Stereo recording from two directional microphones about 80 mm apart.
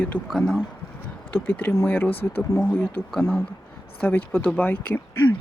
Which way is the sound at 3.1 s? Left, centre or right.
Centre.